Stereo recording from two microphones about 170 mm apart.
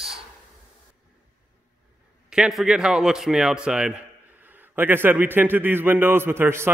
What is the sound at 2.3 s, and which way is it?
A man's voice, centre (ahead or behind).